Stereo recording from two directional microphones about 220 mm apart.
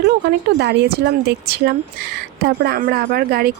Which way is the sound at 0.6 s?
50° right (ahead or behind).